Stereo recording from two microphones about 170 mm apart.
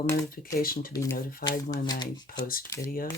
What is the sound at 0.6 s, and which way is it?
Speech, 60° left (ahead or behind).